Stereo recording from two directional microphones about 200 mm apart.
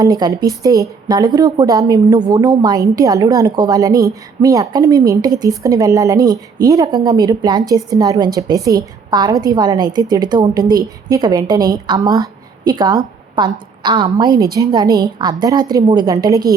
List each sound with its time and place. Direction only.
0.0 s a woman's voice: 20° right (ahead or behind)